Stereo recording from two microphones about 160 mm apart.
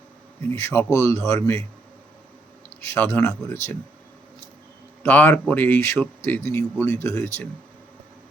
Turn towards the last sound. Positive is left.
turn(degrees=20)  # may be behind; listen again after turning